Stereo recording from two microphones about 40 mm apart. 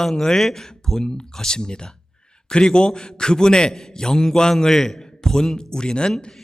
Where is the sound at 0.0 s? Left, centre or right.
Centre.